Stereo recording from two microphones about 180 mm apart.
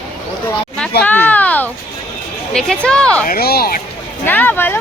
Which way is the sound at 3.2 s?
55° left (ahead or behind).